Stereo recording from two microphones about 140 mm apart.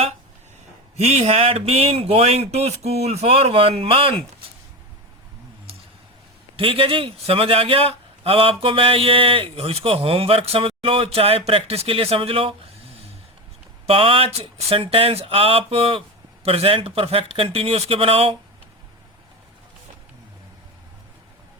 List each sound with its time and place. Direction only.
0.9 s a man's voice: 50° right (ahead or behind)
6.6 s a man's voice: 40° right (ahead or behind)
13.8 s a man's voice: 40° right (ahead or behind)